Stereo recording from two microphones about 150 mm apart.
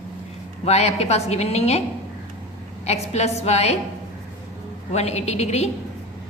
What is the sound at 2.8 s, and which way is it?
Speech, 45° left (ahead or behind).